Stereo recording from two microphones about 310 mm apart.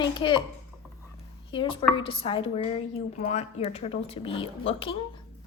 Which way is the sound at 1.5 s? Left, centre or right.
Centre.